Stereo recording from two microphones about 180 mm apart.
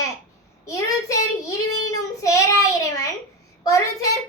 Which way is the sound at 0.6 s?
15° left (ahead or behind).